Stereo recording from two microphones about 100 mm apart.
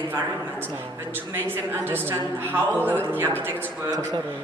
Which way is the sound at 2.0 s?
20° right (ahead or behind).